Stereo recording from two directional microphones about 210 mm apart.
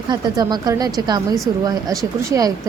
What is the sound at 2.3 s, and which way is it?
Speech, 15° right (ahead or behind).